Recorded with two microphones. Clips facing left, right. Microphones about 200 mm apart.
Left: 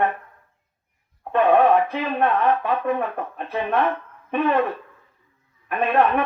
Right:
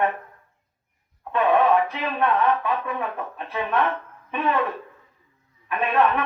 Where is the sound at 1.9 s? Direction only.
55° left (ahead or behind).